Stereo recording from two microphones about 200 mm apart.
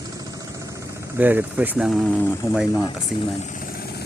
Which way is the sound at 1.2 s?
10° right (ahead or behind).